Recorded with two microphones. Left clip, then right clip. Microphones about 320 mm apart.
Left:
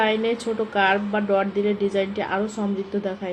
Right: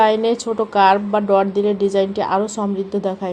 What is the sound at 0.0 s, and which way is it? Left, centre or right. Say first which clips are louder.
A woman's voice: right 6 dB; right.